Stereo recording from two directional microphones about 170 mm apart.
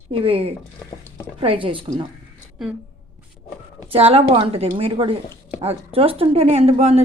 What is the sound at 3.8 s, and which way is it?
Speech, 35° right (ahead or behind).